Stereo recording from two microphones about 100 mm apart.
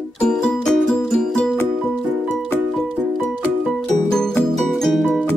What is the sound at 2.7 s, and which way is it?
Music, 5° left (ahead or behind).